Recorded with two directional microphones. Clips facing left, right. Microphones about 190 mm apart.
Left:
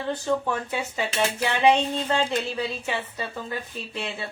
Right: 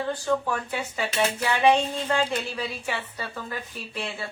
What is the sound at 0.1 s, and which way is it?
Speech, 20° left (ahead or behind).